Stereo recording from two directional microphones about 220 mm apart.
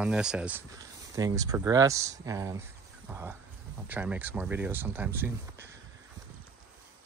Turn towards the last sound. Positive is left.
turn(degrees=-10)  # may be behind; listen again after turning